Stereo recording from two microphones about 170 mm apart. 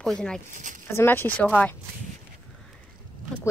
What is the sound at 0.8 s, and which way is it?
Speech, 15° left (ahead or behind).